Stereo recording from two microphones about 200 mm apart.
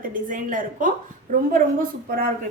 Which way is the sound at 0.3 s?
40° right (ahead or behind).